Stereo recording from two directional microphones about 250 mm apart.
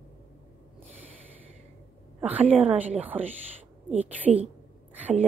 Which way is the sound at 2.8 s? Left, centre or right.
Centre.